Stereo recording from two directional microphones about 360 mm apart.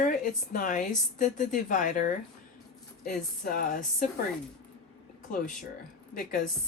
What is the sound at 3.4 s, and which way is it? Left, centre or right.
Speech, left.